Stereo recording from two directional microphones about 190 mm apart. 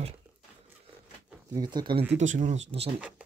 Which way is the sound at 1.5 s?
20° right (ahead or behind).